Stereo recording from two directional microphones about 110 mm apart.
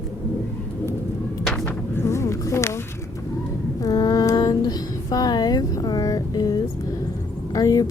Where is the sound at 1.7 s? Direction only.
20° left (ahead or behind).